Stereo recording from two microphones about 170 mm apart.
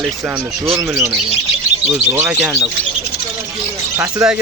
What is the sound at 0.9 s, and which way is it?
Speech, 15° right (ahead or behind).